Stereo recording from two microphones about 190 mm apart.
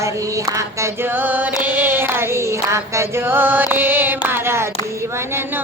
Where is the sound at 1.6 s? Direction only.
10° right (ahead or behind).